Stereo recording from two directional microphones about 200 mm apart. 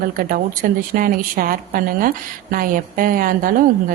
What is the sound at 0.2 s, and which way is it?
Speech, 45° right (ahead or behind).